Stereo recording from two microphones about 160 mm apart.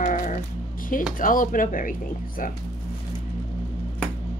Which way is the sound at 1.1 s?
55° left (ahead or behind).